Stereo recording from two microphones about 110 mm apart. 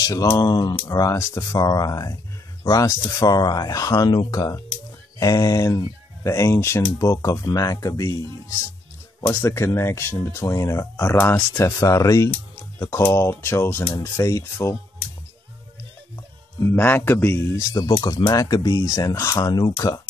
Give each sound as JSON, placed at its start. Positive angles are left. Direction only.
{"t": 0.0, "sound": "speech", "side_deg": 30}
{"t": 9.3, "sound": "speech", "side_deg": 25}
{"t": 16.5, "sound": "speech", "side_deg": 20}